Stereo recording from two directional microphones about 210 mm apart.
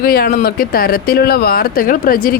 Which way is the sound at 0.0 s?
45° left (ahead or behind).